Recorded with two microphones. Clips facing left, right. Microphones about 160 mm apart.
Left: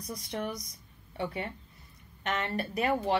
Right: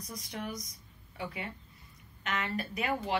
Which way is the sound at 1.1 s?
35° left (ahead or behind).